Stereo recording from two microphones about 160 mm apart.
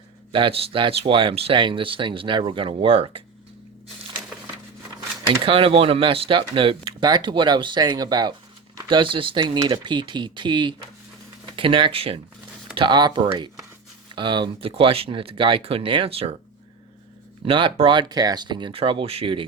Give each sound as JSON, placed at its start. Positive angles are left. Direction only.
{"t": 0.3, "sound": "speech", "side_deg": -35}
{"t": 5.4, "sound": "speech", "side_deg": -35}
{"t": 17.4, "sound": "speech", "side_deg": -35}